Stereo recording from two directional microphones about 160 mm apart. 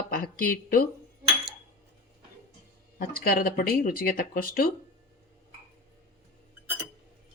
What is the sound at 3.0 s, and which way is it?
Speech, 65° left (ahead or behind).